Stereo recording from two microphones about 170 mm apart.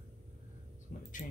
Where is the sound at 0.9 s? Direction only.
55° left (ahead or behind).